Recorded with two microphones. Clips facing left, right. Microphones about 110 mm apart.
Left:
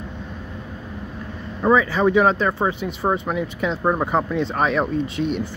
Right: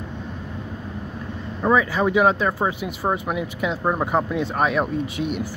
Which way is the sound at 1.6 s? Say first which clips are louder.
Left 2 dB; centre (ahead or behind).